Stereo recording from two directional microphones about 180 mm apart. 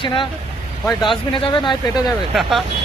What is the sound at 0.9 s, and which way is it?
Speech, centre (ahead or behind).